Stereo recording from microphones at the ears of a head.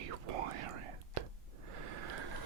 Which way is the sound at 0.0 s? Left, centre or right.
Right.